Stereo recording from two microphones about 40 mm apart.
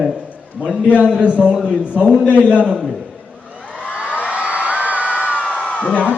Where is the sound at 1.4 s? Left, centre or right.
Centre.